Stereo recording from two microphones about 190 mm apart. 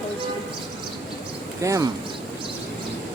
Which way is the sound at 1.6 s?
15° right (ahead or behind).